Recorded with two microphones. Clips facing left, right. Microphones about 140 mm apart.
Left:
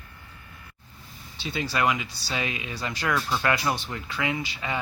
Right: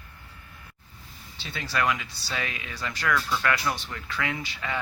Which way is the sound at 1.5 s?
20° left (ahead or behind).